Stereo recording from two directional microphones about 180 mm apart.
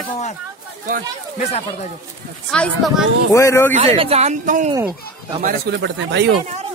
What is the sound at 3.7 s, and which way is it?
Speech, 35° right (ahead or behind).